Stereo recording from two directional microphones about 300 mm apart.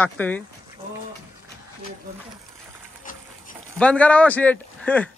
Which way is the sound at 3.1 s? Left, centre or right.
Left.